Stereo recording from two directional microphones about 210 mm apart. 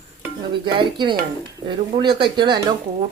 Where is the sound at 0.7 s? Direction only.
20° right (ahead or behind).